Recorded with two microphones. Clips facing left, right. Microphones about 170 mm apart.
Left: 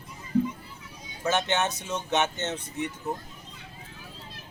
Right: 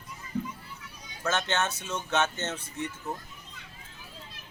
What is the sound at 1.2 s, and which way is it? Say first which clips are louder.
A man's voice: left 3 dB; 15° left (ahead or behind).